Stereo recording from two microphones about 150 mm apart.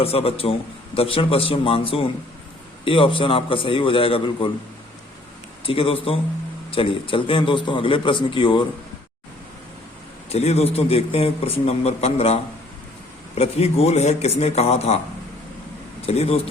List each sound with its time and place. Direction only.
0.0 s a man's voice: 40° left (ahead or behind)
5.6 s a man's voice: 40° left (ahead or behind)
10.2 s a man's voice: 45° left (ahead or behind)
16.0 s a man's voice: 45° left (ahead or behind)